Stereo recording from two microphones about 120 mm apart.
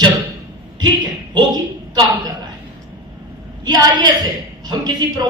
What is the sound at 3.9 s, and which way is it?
A woman's voice, 35° right (ahead or behind).